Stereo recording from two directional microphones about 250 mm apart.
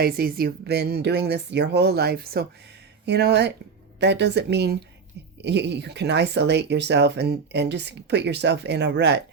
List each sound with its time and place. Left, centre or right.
0.0 s speech: right